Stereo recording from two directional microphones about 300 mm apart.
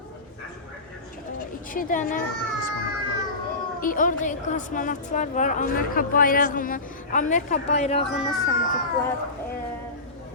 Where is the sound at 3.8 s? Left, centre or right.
Left.